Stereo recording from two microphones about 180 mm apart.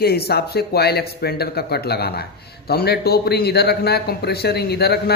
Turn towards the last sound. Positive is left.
turn(degrees=60)  # may be behind; listen again after turning